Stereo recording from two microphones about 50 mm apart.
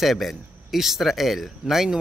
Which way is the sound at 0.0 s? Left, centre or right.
Centre.